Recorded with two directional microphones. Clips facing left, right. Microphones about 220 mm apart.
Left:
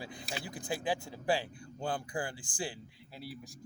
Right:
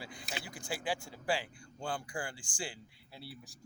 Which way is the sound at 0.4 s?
20° left (ahead or behind).